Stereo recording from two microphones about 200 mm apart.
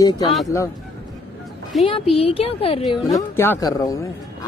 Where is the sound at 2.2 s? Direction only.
30° left (ahead or behind).